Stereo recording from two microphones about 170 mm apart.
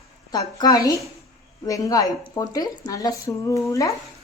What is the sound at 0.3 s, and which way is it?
Speech, 25° left (ahead or behind).